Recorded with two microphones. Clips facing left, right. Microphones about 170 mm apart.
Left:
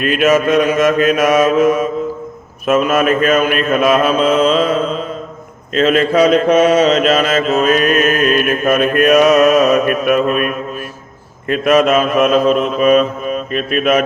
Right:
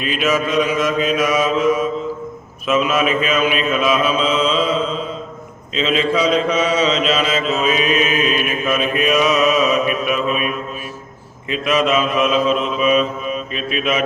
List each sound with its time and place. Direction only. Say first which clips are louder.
0.0 s mantra: left 6 dB; 55° left (ahead or behind)